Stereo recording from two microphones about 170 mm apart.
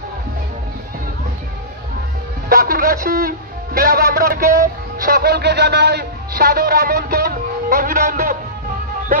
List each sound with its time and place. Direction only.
2.5 s a man's voice: 55° right (ahead or behind)